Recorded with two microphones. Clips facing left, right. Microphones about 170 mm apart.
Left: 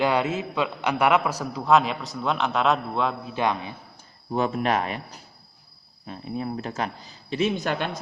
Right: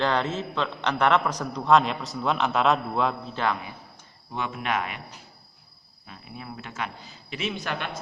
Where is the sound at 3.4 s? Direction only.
20° left (ahead or behind).